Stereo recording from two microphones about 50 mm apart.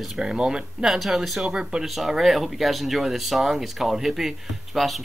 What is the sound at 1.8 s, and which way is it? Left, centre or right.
Speech, centre.